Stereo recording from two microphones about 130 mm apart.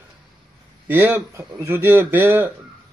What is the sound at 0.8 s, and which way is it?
A man's voice, 15° right (ahead or behind).